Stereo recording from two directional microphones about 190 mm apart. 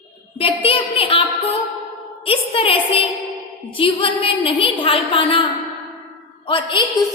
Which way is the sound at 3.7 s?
25° left (ahead or behind).